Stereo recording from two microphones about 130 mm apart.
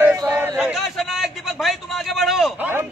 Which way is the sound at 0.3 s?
15° right (ahead or behind).